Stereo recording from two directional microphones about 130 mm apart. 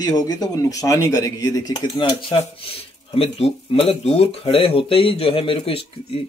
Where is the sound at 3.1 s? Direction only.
50° left (ahead or behind).